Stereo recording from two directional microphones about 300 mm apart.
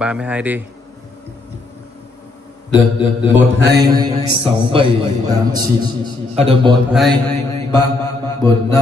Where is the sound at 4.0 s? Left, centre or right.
Centre.